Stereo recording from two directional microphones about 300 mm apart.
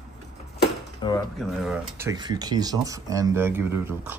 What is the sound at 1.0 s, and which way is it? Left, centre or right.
Speech, centre.